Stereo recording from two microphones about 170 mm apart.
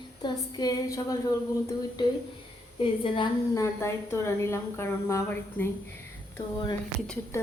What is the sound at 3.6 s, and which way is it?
A woman's voice, 15° left (ahead or behind).